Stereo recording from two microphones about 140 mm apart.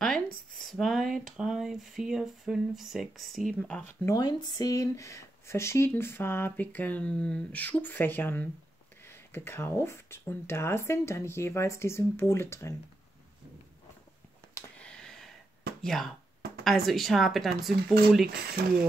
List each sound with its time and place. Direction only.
0.0 s speech: 5° left (ahead or behind)
4.0 s speech: 25° left (ahead or behind)
14.8 s a sound: 5° left (ahead or behind)
15.8 s speech: centre (ahead or behind)